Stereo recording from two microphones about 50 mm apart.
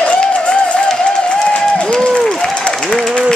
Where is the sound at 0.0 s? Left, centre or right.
Centre.